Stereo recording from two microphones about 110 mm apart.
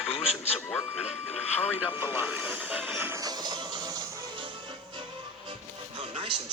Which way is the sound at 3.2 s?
35° right (ahead or behind).